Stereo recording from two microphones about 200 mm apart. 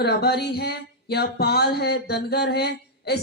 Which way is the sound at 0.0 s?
55° left (ahead or behind).